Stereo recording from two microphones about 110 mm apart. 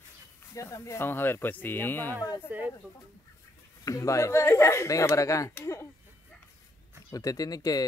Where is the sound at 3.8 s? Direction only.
30° left (ahead or behind).